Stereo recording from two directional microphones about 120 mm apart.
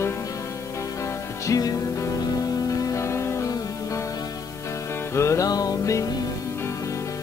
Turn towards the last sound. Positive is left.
turn(degrees=30)  # may be behind; listen again after turning